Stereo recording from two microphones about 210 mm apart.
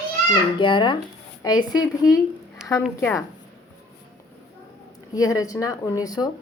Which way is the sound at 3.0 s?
10° left (ahead or behind).